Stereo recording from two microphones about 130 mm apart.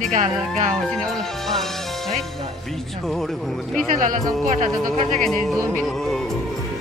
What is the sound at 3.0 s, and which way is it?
Speech, 5° left (ahead or behind).